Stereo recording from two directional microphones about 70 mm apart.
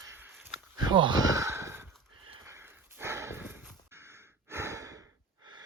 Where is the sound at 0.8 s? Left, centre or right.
Right.